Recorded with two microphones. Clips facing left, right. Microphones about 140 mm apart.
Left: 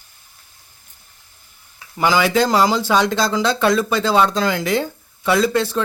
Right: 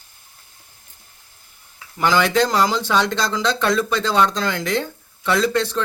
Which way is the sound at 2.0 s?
5° left (ahead or behind).